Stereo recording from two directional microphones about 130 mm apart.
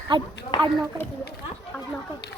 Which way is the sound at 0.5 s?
40° left (ahead or behind).